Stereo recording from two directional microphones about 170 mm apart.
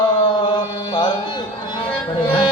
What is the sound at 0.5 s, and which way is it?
Music, 25° left (ahead or behind).